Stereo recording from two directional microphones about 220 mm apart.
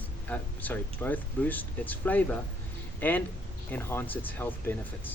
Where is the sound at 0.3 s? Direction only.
10° left (ahead or behind).